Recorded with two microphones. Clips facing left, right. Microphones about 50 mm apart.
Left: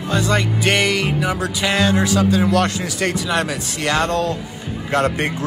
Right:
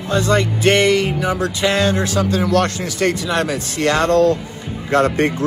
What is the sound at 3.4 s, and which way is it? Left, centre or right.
Speech, right.